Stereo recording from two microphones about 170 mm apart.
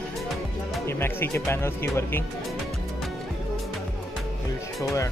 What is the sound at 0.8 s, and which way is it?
Speech, 15° left (ahead or behind).